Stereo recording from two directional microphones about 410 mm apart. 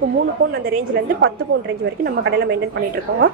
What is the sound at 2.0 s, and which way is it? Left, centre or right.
Speech, right.